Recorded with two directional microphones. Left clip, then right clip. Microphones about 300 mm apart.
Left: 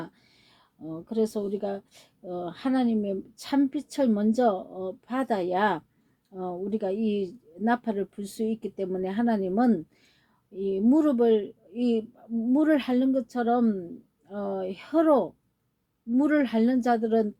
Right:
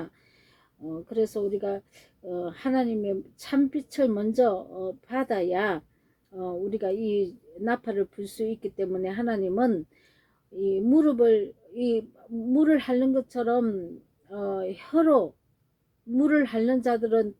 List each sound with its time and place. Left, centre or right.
1.0 s a woman's voice: left